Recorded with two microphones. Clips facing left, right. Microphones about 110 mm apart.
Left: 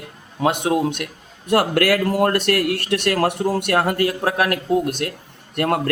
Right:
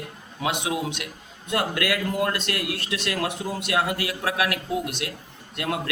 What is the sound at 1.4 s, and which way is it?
Speech, 65° left (ahead or behind).